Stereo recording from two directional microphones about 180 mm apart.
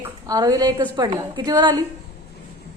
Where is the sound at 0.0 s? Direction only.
20° right (ahead or behind).